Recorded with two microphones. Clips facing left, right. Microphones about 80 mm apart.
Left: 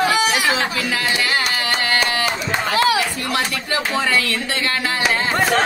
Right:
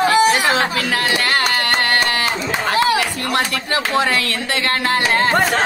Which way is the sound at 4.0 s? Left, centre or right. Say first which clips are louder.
Right 1 dB; right.